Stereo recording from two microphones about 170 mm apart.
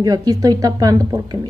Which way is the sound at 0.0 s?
20° right (ahead or behind).